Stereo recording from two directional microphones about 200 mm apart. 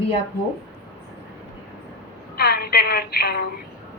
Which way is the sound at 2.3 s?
50° left (ahead or behind).